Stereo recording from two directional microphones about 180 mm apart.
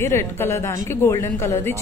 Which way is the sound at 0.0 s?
15° left (ahead or behind).